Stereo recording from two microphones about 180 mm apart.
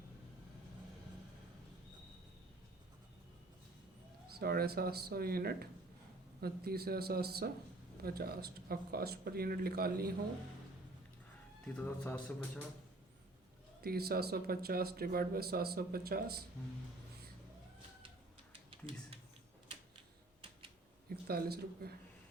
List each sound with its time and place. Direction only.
4.3 s speech: 60° right (ahead or behind)
11.6 s speech: 10° left (ahead or behind)
13.8 s speech: 60° right (ahead or behind)
21.2 s speech: 60° right (ahead or behind)